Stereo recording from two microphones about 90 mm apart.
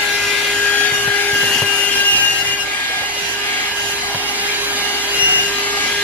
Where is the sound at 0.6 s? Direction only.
15° left (ahead or behind).